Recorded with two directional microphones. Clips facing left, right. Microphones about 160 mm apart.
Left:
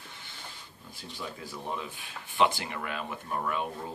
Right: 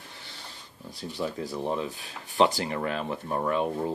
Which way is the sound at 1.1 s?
35° right (ahead or behind).